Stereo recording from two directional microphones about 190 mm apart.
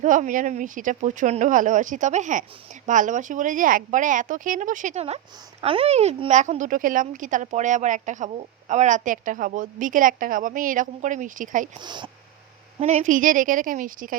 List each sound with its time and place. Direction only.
0.0 s speech: 40° right (ahead or behind)
11.8 s speech: 25° right (ahead or behind)
12.8 s speech: 40° right (ahead or behind)